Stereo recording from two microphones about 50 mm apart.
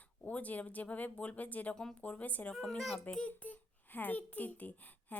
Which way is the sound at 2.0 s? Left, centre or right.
Left.